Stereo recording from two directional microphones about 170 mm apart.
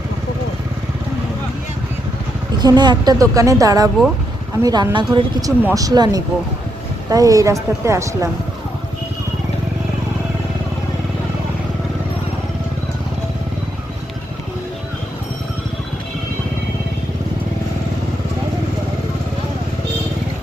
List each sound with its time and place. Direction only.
2.6 s a woman's voice: 25° right (ahead or behind)